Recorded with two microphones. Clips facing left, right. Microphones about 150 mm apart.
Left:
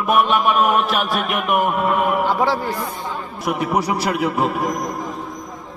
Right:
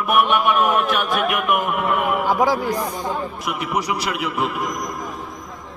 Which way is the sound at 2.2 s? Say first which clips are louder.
Even; 10° right (ahead or behind).